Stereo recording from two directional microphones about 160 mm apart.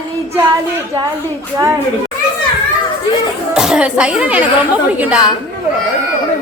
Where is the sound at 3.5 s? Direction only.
5° right (ahead or behind).